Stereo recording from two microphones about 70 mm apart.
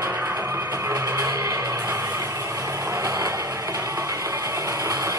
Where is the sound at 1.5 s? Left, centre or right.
Right.